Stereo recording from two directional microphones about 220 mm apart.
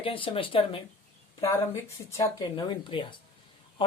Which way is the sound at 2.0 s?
15° left (ahead or behind).